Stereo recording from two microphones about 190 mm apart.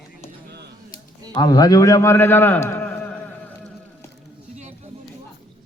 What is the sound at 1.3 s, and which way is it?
A man's voice, 20° left (ahead or behind).